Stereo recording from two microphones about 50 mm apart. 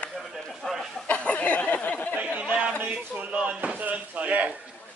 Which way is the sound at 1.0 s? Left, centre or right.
Left.